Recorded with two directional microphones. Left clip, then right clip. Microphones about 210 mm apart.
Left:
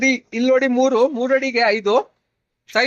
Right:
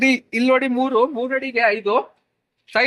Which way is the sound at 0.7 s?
40° left (ahead or behind).